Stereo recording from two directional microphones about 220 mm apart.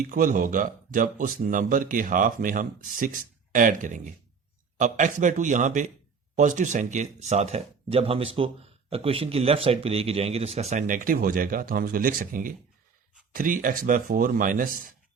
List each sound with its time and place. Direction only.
0.0 s speech: 35° right (ahead or behind)